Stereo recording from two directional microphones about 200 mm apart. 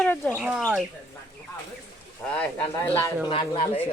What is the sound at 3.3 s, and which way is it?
Speech, 25° left (ahead or behind).